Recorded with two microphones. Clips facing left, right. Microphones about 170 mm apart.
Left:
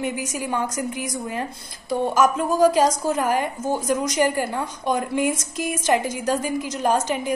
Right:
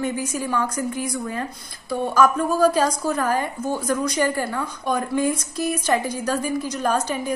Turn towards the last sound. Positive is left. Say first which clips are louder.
# left 1 dB
turn(degrees=15)  # may be behind; listen again after turning